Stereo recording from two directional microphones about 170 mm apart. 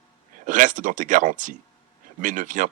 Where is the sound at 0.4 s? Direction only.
50° right (ahead or behind).